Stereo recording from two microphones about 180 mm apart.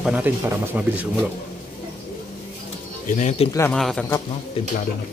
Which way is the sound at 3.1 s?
40° left (ahead or behind).